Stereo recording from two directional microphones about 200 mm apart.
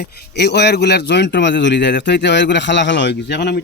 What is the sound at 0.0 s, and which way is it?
Speech, 55° left (ahead or behind).